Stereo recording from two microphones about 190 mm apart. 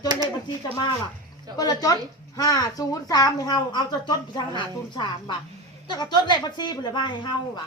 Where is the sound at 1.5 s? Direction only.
20° left (ahead or behind).